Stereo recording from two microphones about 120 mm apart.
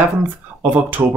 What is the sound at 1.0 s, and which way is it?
Speech, 25° right (ahead or behind).